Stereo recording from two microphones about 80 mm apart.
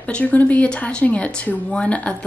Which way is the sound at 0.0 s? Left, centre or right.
Centre.